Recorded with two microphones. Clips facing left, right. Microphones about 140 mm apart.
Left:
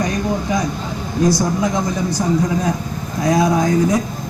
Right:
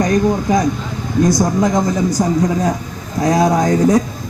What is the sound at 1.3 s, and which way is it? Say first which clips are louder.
A man's voice: right 4 dB; 40° right (ahead or behind).